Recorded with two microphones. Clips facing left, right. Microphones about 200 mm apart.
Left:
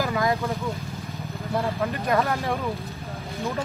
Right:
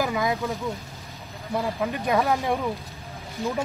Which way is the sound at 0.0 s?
15° right (ahead or behind).